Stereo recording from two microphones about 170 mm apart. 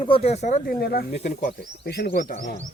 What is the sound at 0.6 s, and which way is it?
Speech, 70° left (ahead or behind).